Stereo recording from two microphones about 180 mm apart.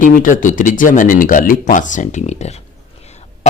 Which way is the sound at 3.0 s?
40° left (ahead or behind).